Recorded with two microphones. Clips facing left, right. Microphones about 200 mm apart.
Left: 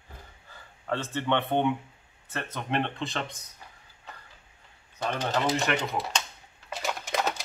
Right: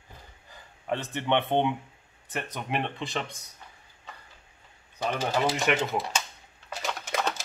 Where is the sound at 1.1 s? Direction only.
20° right (ahead or behind).